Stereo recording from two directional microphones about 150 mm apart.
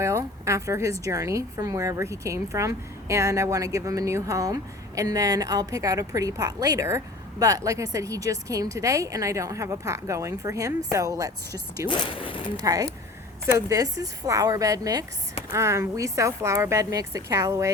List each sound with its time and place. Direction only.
0.0 s speech: 20° right (ahead or behind)
11.9 s speech: 35° left (ahead or behind)
12.6 s speech: 25° right (ahead or behind)